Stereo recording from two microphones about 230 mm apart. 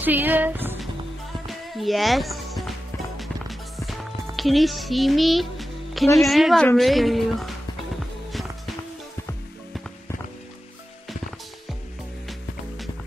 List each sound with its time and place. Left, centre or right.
0.0 s speech: centre
3.2 s music: centre
6.1 s a woman's voice: centre
8.3 s music: centre
12.3 s music: centre